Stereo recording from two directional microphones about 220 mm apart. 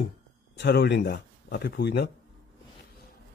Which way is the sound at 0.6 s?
50° left (ahead or behind).